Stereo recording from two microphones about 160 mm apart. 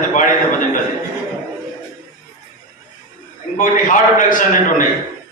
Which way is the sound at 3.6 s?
55° left (ahead or behind).